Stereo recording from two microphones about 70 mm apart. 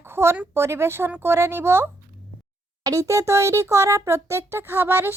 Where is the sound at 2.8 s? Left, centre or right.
Right.